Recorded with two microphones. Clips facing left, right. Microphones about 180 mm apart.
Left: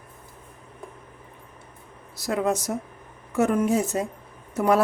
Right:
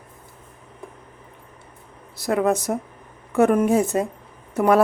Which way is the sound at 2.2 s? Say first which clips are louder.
Right 4 dB; 60° right (ahead or behind).